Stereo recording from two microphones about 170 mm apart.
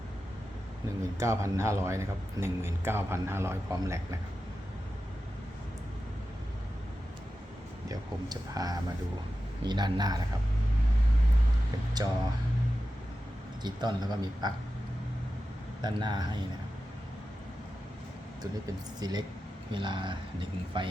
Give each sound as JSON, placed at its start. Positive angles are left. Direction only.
{"t": 1.2, "sound": "a man's voice", "side_deg": -15}
{"t": 7.9, "sound": "speech", "side_deg": -20}
{"t": 12.0, "sound": "speech", "side_deg": -25}
{"t": 13.6, "sound": "speech", "side_deg": -25}
{"t": 15.8, "sound": "speech", "side_deg": -25}
{"t": 18.9, "sound": "speech", "side_deg": -25}